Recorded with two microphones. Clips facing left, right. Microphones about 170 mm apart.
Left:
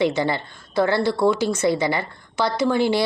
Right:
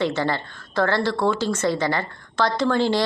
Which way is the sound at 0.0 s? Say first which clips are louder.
Left 2 dB; 15° left (ahead or behind).